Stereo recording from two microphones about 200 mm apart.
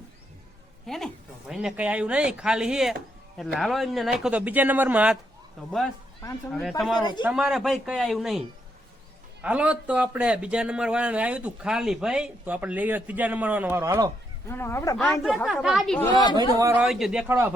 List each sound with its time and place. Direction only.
0.9 s a man's voice: centre (ahead or behind); by 14.1 s 15° right (ahead or behind)
14.4 s speech: 10° left (ahead or behind)
14.9 s a man's voice: centre (ahead or behind)
16.3 s a man's voice: 20° right (ahead or behind)
16.7 s a man's voice: centre (ahead or behind)